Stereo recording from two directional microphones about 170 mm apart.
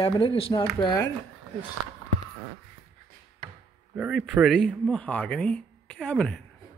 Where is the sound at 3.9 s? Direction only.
5° right (ahead or behind).